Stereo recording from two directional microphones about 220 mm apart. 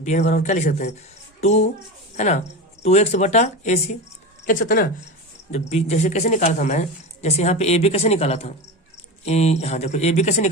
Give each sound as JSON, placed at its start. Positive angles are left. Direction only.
{"t": 0.0, "sound": "speech", "side_deg": 35}
{"t": 5.5, "sound": "speech", "side_deg": 30}